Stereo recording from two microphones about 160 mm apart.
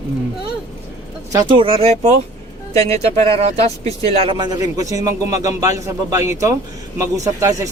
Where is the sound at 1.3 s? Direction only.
30° right (ahead or behind).